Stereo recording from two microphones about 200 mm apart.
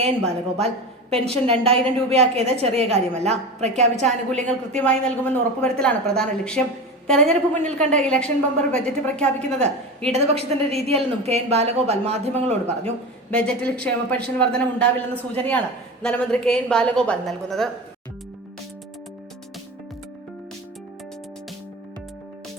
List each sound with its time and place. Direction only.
1.2 s a woman's voice: 30° right (ahead or behind)
4.0 s a woman's voice: 5° left (ahead or behind)
10.1 s a woman's voice: 30° right (ahead or behind)
13.3 s a woman's voice: 5° left (ahead or behind)